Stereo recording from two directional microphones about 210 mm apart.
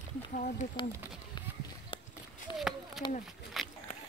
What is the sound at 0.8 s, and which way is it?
Speech, 25° left (ahead or behind).